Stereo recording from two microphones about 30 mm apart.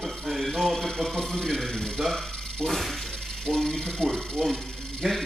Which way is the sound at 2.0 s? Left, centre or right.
Centre.